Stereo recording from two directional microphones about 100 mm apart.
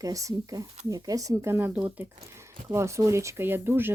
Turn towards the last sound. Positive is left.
turn(degrees=-20)  # may be behind; listen again after turning